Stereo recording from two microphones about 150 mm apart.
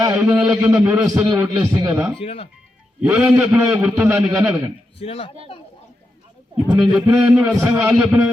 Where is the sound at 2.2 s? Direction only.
40° left (ahead or behind).